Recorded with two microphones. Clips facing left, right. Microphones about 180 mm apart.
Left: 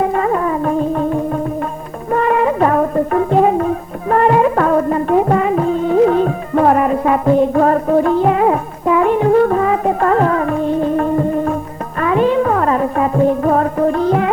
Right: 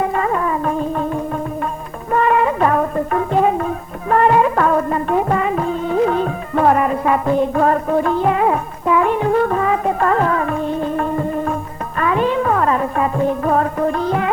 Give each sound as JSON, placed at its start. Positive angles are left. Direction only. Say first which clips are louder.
{"t": 0.0, "sound": "music", "louder": "left 3 dB", "side_deg": 35}